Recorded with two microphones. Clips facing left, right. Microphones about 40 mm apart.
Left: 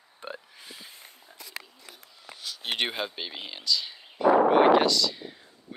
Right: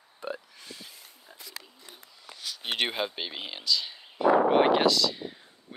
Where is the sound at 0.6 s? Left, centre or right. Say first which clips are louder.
Even; centre.